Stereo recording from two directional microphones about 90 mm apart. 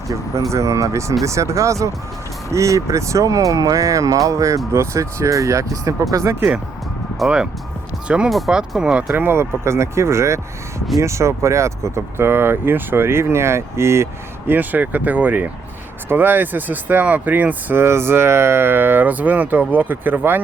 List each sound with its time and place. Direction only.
0.5 s speech: 35° right (ahead or behind)
8.0 s speech: 10° right (ahead or behind)
9.0 s speech: 25° right (ahead or behind)